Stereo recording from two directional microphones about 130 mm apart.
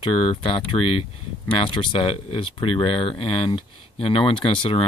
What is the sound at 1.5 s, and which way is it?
Speech, 40° left (ahead or behind).